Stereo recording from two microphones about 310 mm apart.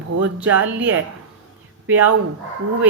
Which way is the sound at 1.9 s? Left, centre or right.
Right.